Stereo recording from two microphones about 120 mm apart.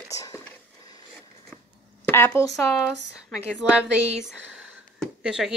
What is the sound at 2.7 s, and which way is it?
Speech, centre (ahead or behind).